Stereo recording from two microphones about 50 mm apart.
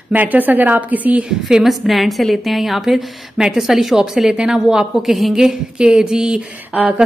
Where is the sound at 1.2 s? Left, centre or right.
Centre.